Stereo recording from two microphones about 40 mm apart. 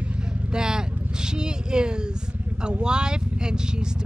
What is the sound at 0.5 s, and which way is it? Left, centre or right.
Vehicle, centre.